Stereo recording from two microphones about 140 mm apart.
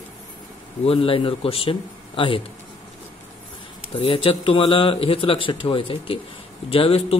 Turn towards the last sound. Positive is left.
turn(degrees=40)  # may be behind; listen again after turning